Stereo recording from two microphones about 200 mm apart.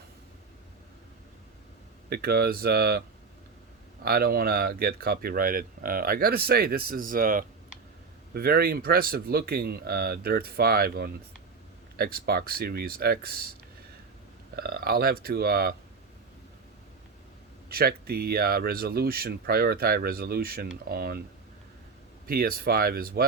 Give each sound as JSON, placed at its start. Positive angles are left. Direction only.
{"t": 2.0, "sound": "speech", "side_deg": -50}
{"t": 4.0, "sound": "speech", "side_deg": -50}
{"t": 17.7, "sound": "speech", "side_deg": -50}
{"t": 22.3, "sound": "speech", "side_deg": -50}